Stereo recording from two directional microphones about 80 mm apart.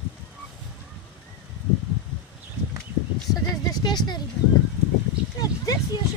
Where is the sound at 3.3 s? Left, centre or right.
Left.